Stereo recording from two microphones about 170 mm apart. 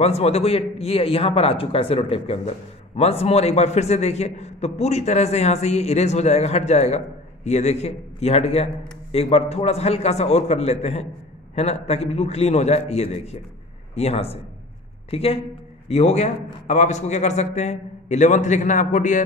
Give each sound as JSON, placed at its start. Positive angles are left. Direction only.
{"t": 0.0, "sound": "a man's voice", "side_deg": 40}